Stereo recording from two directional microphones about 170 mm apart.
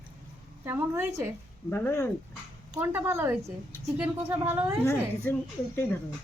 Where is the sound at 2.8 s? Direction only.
10° right (ahead or behind).